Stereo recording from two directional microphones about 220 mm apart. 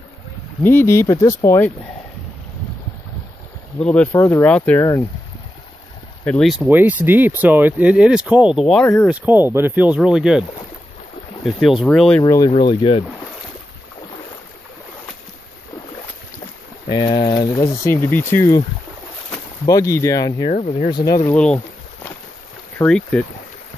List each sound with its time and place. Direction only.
0.6 s speech: 10° left (ahead or behind)
3.8 s speech: 5° left (ahead or behind)
6.2 s speech: centre (ahead or behind)
9.0 s speech: 5° right (ahead or behind)
11.4 s speech: centre (ahead or behind)
12.2 s speech: 15° left (ahead or behind)
16.9 s speech: 20° left (ahead or behind)
19.6 s speech: 15° left (ahead or behind)
20.4 s speech: 30° left (ahead or behind)
20.9 s speech: 15° left (ahead or behind)
22.8 s speech: 5° left (ahead or behind)